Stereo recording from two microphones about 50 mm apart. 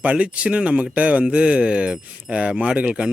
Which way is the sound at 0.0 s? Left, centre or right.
Right.